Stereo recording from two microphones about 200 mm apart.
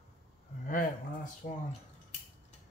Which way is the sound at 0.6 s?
40° left (ahead or behind).